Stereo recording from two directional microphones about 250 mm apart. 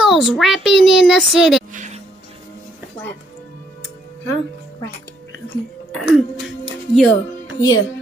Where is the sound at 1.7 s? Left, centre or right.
Right.